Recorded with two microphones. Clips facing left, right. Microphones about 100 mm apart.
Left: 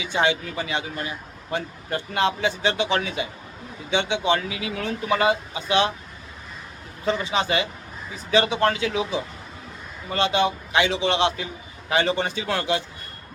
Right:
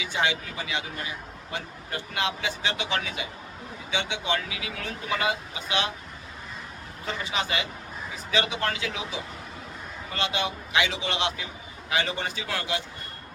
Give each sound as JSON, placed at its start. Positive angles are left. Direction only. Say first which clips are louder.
{"t": 0.0, "sound": "speech", "louder": "left 5 dB", "side_deg": 30}
{"t": 7.0, "sound": "speech", "louder": "left 7 dB", "side_deg": 30}